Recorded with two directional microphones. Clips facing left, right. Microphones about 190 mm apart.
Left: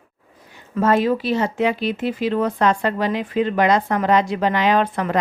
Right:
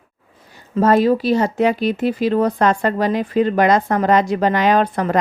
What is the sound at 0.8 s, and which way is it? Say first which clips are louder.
Speech: right 4 dB; 35° right (ahead or behind).